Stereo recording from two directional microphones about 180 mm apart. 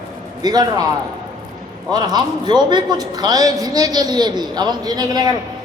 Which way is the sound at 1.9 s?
25° right (ahead or behind).